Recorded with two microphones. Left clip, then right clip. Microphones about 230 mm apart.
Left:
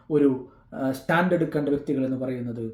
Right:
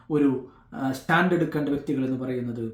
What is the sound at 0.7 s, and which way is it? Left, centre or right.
Speech, centre.